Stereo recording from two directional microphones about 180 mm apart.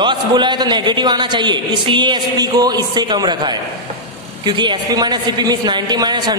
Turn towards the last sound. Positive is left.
turn(degrees=-25)  # may be behind; listen again after turning